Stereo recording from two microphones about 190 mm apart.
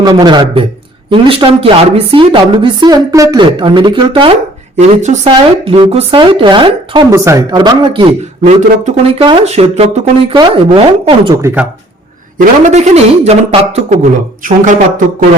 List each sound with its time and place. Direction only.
0.0 s a woman's voice: 25° right (ahead or behind)
4.8 s a man's voice: 40° right (ahead or behind)
5.3 s a woman's voice: 25° right (ahead or behind)
8.4 s a man's voice: 40° right (ahead or behind)
11.4 s speech: 5° right (ahead or behind)
12.4 s a man's voice: 40° right (ahead or behind)